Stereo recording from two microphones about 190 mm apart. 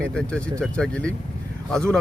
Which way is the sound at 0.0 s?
5° left (ahead or behind).